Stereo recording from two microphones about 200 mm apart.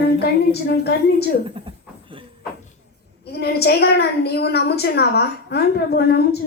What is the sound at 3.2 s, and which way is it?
A woman's voice, 55° left (ahead or behind).